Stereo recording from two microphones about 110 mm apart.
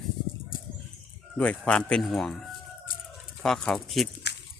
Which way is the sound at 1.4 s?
10° left (ahead or behind).